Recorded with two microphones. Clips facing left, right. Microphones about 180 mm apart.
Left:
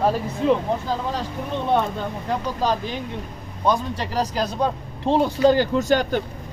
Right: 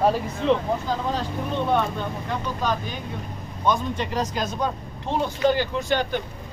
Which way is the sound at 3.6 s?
35° left (ahead or behind).